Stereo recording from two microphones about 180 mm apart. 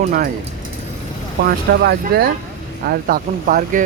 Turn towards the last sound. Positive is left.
turn(degrees=-45)  # may be behind; listen again after turning